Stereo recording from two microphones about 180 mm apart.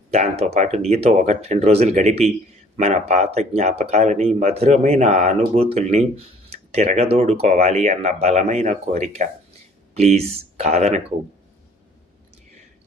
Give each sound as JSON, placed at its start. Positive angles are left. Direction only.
{"t": 0.1, "sound": "speech", "side_deg": -35}